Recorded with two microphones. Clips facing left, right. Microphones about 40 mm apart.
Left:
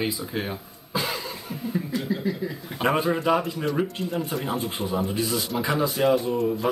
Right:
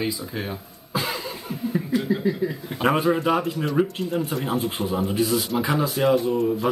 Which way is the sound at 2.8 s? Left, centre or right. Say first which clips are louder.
Right 2 dB; centre.